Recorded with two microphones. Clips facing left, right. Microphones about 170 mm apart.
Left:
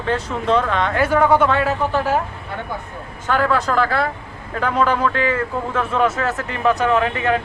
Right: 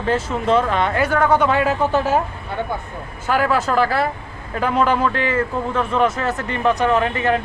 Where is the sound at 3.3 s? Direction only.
5° right (ahead or behind).